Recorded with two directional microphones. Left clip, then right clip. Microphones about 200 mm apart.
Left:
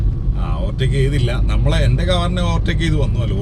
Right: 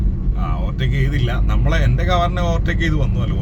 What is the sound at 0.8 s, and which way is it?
Speech, 25° right (ahead or behind).